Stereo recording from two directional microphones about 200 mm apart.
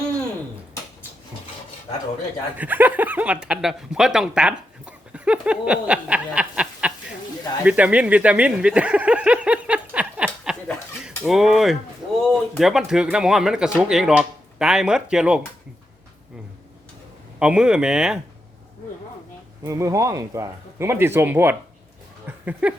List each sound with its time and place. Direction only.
2.6 s speech: 10° right (ahead or behind)
7.6 s a sound: 5° right (ahead or behind)
12.3 s speech: centre (ahead or behind)
17.4 s speech: 5° right (ahead or behind)
19.6 s speech: 15° right (ahead or behind)
22.3 s a sound: 10° right (ahead or behind)